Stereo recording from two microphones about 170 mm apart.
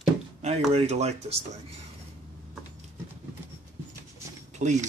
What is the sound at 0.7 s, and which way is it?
Speech, 40° right (ahead or behind).